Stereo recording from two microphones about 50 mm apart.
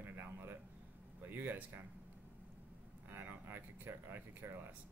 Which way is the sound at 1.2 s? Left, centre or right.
Right.